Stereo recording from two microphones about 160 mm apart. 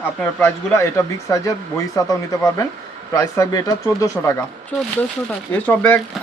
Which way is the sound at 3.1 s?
20° left (ahead or behind).